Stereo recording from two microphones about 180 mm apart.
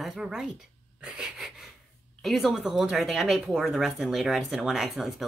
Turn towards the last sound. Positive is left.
turn(degrees=0)  # may be behind; listen again after turning